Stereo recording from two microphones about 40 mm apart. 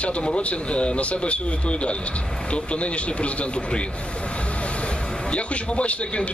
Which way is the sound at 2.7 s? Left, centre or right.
Left.